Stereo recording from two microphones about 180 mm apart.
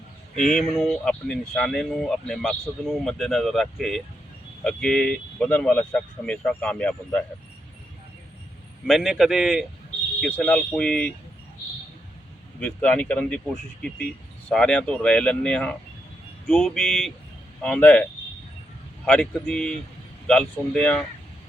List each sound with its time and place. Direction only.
0.3 s speech: 45° left (ahead or behind)
0.6 s speech: 5° left (ahead or behind)
8.9 s speech: centre (ahead or behind)
10.2 s speech: 10° left (ahead or behind)
12.5 s speech: 5° left (ahead or behind)
14.5 s speech: 5° left (ahead or behind)